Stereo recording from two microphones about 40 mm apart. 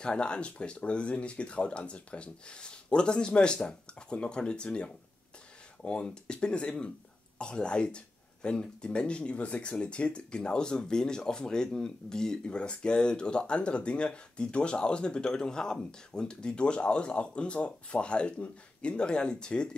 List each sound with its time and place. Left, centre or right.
0.0 s speech: left